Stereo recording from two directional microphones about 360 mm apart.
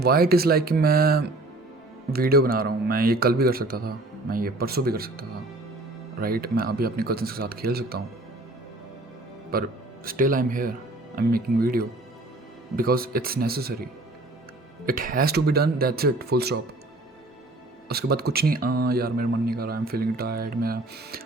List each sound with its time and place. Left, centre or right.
0.0 s speech: right
9.5 s speech: right
14.8 s speech: right
17.8 s speech: right